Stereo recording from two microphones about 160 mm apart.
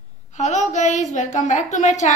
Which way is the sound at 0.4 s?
50° left (ahead or behind).